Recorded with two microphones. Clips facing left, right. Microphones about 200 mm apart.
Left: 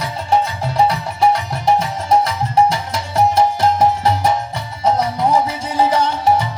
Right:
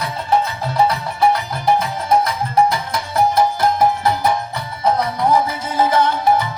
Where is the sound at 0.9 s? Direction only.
30° left (ahead or behind).